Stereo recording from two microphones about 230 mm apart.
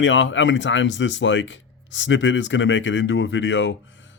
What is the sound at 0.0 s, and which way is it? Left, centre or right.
Speech, left.